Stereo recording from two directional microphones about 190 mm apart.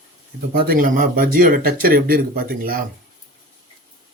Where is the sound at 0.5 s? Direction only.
50° right (ahead or behind).